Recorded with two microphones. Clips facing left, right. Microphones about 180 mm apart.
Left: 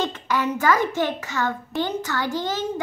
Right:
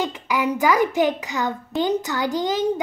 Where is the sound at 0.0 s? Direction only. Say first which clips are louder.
Right 1 dB; 10° right (ahead or behind).